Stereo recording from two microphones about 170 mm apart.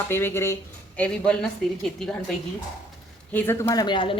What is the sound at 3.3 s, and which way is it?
Speech, 10° left (ahead or behind).